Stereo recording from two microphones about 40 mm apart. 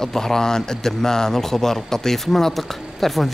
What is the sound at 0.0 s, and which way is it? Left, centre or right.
A man's voice, centre.